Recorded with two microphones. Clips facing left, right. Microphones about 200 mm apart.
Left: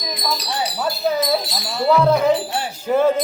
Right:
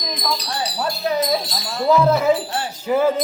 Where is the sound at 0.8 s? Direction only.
5° left (ahead or behind).